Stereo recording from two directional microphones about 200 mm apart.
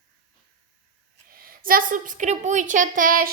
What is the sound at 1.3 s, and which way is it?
A woman's voice, 45° right (ahead or behind).